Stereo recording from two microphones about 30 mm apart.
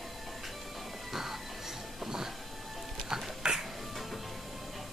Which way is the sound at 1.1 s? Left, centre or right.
Centre.